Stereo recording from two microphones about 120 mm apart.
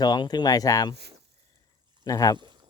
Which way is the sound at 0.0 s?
35° left (ahead or behind).